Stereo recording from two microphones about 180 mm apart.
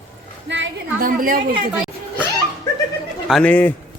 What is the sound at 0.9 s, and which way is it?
Speech, 50° right (ahead or behind).